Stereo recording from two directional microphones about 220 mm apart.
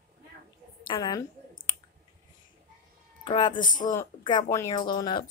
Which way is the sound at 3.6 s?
35° left (ahead or behind).